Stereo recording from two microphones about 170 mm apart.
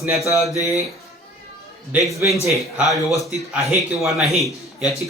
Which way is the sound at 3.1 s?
20° left (ahead or behind).